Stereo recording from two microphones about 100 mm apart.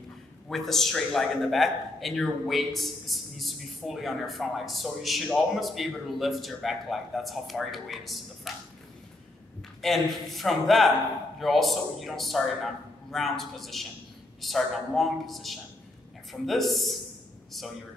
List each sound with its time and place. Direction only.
0.5 s a man's voice: centre (ahead or behind)
8.5 s a sound: centre (ahead or behind)
9.8 s a man's voice: centre (ahead or behind)